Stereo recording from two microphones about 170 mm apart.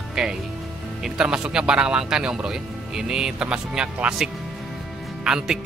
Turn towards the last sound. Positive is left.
turn(degrees=-5)  # may be behind; listen again after turning